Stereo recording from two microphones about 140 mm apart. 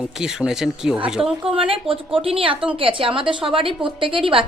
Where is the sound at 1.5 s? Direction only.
40° right (ahead or behind).